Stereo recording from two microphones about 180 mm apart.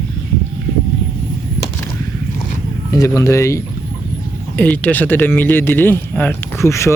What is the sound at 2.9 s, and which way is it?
Speech, 15° left (ahead or behind).